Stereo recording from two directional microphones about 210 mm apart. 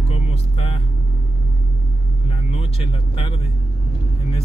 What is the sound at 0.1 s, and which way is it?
Vehicle, 30° left (ahead or behind).